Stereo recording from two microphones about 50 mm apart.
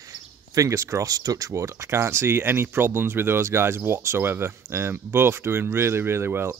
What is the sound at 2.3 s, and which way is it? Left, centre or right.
Speech, right.